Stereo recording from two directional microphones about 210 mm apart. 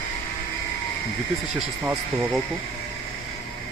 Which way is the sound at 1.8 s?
5° right (ahead or behind).